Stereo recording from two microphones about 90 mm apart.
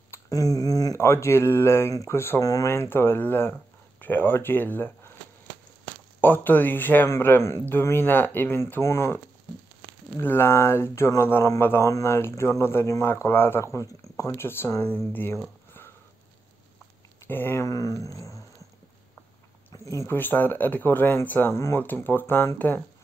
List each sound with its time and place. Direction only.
0.1 s a sound: 40° left (ahead or behind)
1.0 s speech: 30° left (ahead or behind)
6.2 s speech: 20° left (ahead or behind)
17.3 s speech: 25° left (ahead or behind)
17.6 s speech: 40° left (ahead or behind)
19.7 s speech: 35° left (ahead or behind)